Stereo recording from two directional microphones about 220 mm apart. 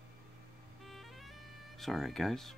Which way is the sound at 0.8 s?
Centre (ahead or behind).